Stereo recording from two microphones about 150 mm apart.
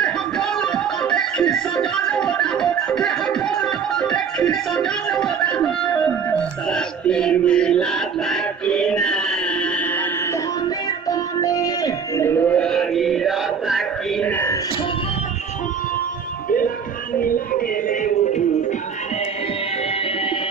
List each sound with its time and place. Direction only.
0.0 s music: 5° left (ahead or behind)
11.1 s music: 25° left (ahead or behind); by 14.2 s centre (ahead or behind)
14.2 s music: 15° left (ahead or behind)
16.4 s music: 70° left (ahead or behind)